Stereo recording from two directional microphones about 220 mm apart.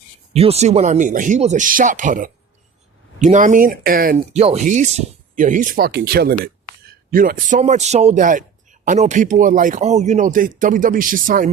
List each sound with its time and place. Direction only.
0.3 s a man's voice: 30° right (ahead or behind)